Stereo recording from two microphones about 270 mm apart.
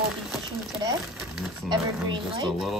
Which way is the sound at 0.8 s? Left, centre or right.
Centre.